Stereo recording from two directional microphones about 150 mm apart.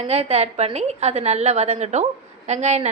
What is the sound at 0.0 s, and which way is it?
A woman's voice, 45° right (ahead or behind).